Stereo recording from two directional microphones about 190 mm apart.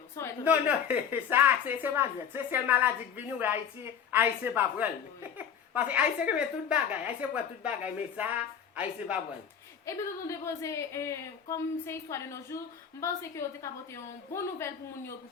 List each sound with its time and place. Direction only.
0.4 s a woman's voice: 10° right (ahead or behind)
9.8 s a woman's voice: 15° left (ahead or behind)